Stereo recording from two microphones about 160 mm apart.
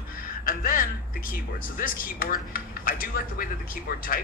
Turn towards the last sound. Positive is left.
turn(degrees=60)  # may be behind; listen again after turning